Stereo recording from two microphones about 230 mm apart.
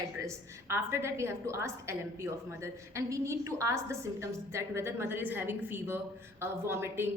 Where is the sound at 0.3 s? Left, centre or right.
Centre.